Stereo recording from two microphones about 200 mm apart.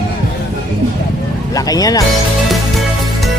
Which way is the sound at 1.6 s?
20° left (ahead or behind).